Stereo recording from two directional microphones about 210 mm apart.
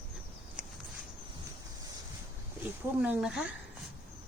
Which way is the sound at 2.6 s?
5° right (ahead or behind).